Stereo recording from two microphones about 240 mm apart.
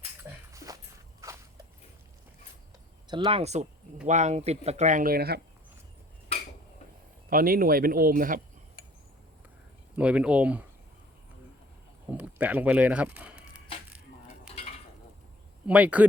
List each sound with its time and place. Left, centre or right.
0.5 s a sound: centre
1.2 s walk: centre
3.1 s speech: centre; by 5.4 s right
7.3 s speech: right
9.9 s speech: centre
12.0 s a sound: centre
15.6 s speech: centre